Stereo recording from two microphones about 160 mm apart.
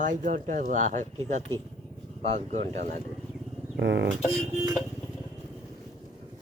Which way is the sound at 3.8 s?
90° right.